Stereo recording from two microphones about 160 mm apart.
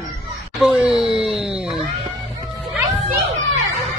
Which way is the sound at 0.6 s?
5° right (ahead or behind).